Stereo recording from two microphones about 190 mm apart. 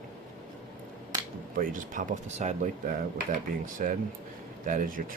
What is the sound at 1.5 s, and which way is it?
Cutlery, 45° right (ahead or behind).